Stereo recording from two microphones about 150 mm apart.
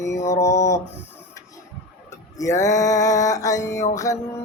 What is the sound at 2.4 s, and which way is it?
Mantra, 20° left (ahead or behind).